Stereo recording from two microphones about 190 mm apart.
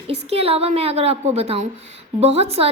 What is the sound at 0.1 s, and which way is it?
A woman's voice, 30° right (ahead or behind).